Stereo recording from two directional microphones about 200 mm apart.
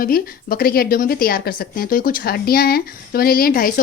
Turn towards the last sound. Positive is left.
turn(degrees=45)  # may be behind; listen again after turning